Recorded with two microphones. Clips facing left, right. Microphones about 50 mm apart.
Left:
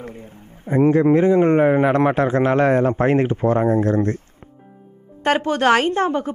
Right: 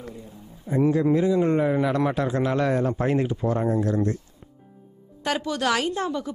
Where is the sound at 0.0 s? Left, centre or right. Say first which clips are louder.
Left 4 dB; left.